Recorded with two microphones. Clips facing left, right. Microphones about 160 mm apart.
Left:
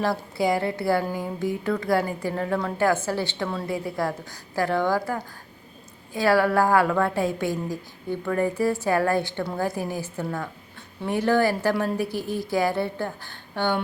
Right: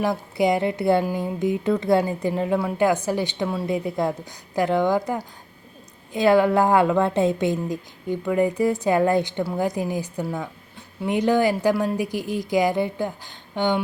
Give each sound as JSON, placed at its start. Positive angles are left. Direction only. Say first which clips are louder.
{"t": 0.0, "sound": "a woman's voice", "louder": "right 3 dB", "side_deg": -20}